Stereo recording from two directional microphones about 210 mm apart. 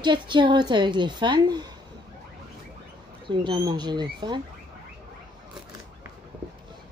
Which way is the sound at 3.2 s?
20° right (ahead or behind).